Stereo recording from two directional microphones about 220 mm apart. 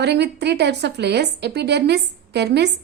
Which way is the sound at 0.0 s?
50° right (ahead or behind).